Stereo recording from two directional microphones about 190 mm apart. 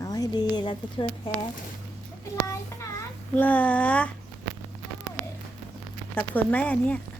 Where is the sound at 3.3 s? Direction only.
10° left (ahead or behind).